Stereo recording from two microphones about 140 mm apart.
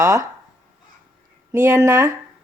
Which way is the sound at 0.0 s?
20° right (ahead or behind).